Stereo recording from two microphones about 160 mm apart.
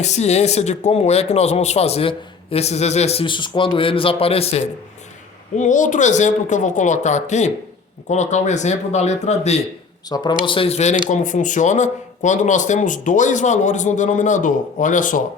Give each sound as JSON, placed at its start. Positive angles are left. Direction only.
{"t": 0.0, "sound": "speech", "side_deg": 45}
{"t": 5.5, "sound": "speech", "side_deg": 50}
{"t": 10.1, "sound": "speech", "side_deg": 25}